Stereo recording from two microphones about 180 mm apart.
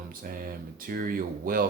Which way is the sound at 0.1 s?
55° right (ahead or behind).